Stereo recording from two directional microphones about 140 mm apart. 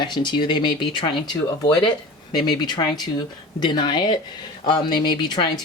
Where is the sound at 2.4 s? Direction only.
35° left (ahead or behind).